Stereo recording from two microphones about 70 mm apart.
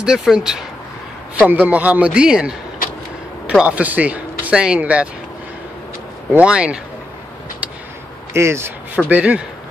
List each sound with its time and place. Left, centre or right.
0.0 s speech: centre
1.5 s a man's voice: right
6.4 s speech: centre
8.3 s speech: right
8.9 s a man's voice: right